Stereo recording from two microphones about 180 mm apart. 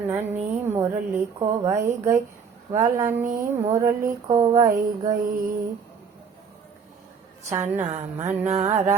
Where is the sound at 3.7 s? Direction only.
15° right (ahead or behind).